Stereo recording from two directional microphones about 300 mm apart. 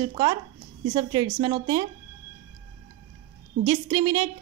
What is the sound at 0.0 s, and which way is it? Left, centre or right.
A woman's voice, centre.